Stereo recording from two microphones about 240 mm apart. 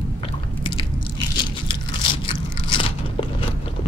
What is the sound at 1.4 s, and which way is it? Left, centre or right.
Biting, centre.